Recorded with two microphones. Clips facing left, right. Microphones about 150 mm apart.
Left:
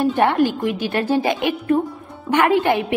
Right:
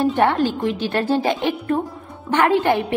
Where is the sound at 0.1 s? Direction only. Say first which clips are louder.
Left 1 dB; 15° left (ahead or behind).